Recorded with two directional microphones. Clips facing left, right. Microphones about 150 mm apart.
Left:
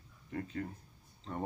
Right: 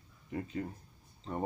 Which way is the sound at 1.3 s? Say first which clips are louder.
Right 2 dB; 15° right (ahead or behind).